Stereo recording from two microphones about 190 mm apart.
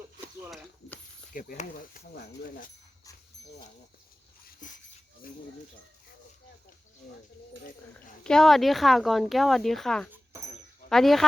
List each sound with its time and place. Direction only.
1.3 s speech: 45° left (ahead or behind)
4.6 s speech: 40° left (ahead or behind)
7.9 s speech: 5° left (ahead or behind)